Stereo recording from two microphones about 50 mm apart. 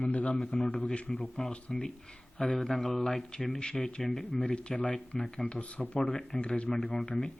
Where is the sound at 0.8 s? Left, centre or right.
Centre.